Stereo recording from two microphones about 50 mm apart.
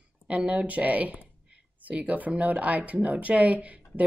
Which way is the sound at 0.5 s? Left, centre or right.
Right.